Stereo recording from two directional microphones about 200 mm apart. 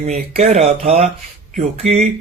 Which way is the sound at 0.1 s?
35° right (ahead or behind).